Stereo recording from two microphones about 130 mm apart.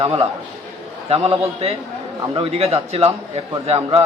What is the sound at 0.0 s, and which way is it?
A man's voice, 45° right (ahead or behind).